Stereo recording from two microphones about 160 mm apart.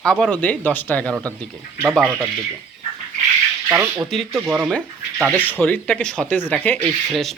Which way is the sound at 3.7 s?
10° right (ahead or behind).